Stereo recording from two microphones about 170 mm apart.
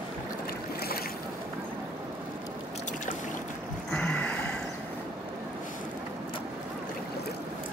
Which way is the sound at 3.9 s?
10° left (ahead or behind).